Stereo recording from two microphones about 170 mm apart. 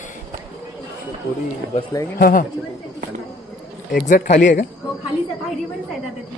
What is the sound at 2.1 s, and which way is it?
Speech, 55° left (ahead or behind).